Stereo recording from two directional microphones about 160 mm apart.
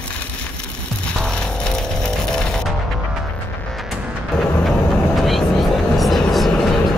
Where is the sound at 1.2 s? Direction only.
5° left (ahead or behind).